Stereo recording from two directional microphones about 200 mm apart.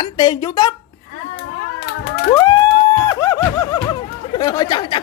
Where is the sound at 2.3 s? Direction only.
20° left (ahead or behind).